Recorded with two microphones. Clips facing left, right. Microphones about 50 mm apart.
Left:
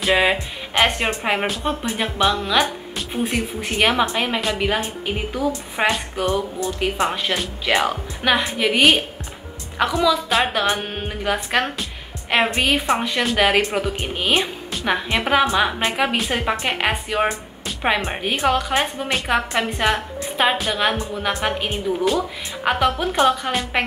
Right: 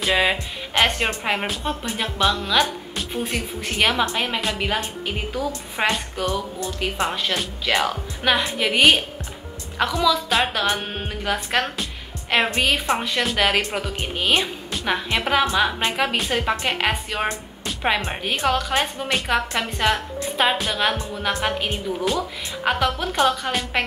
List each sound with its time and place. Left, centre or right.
0.0 s a woman's voice: centre
4.6 s a woman's voice: centre
14.7 s music: centre
15.0 s a woman's voice: centre